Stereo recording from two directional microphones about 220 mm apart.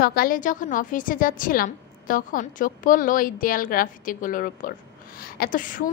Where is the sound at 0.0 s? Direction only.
45° left (ahead or behind).